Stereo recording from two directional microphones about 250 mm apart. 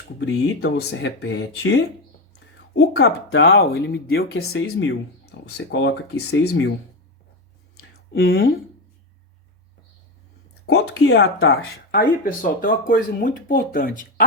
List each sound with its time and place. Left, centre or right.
0.2 s speech: left
4.4 s speech: left
8.2 s speech: left
10.7 s speech: left